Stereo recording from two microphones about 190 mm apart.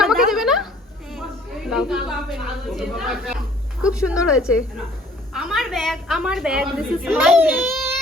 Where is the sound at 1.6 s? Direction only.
5° right (ahead or behind).